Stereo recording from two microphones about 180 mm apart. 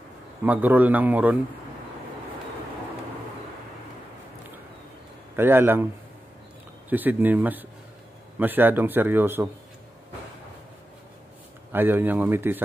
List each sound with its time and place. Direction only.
0.4 s a man's voice: 10° right (ahead or behind)
5.3 s a man's voice: 10° right (ahead or behind)
6.9 s a man's voice: 10° right (ahead or behind)
11.7 s a man's voice: 10° right (ahead or behind)